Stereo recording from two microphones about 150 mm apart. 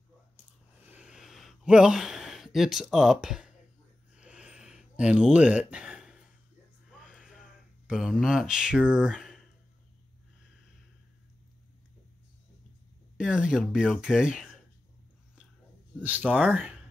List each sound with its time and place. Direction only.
0.8 s a sound: 10° right (ahead or behind)
6.9 s music: 5° right (ahead or behind)
7.8 s speech: 5° right (ahead or behind)
13.2 s speech: 5° right (ahead or behind)
16.0 s speech: 10° right (ahead or behind)